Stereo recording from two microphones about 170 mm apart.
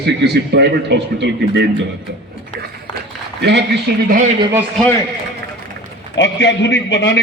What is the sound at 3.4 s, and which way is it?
Speech, 85° right.